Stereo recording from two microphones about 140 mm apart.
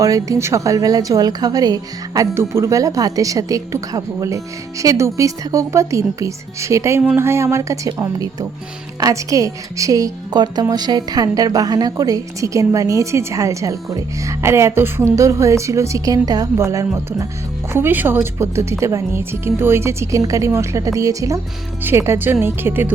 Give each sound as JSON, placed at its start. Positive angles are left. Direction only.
{"t": 0.0, "sound": "a woman's voice", "side_deg": -25}